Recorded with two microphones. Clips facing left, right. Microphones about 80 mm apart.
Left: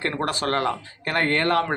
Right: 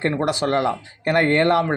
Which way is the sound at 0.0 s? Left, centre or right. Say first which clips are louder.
Right 4 dB; centre.